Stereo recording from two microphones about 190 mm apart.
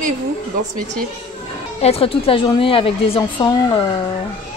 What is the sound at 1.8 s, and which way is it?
A woman's voice, 30° left (ahead or behind).